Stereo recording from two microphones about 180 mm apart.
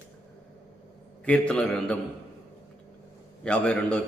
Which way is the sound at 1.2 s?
5° left (ahead or behind).